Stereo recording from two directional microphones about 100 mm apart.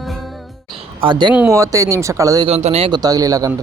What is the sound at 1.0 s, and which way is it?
Speech, 55° right (ahead or behind).